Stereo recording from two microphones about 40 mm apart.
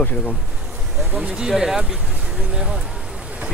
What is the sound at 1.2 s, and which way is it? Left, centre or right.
Speech, right.